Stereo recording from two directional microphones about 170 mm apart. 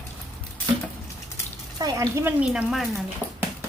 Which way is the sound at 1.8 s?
15° right (ahead or behind).